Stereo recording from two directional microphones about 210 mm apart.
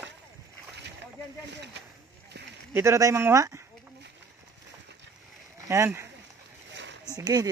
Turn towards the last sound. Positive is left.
turn(degrees=-15)  # may be behind; listen again after turning